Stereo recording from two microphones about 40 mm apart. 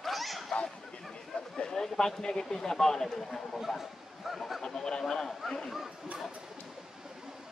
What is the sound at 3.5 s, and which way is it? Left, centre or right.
Speech, centre.